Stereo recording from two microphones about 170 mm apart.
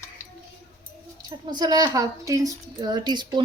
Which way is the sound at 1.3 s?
25° right (ahead or behind).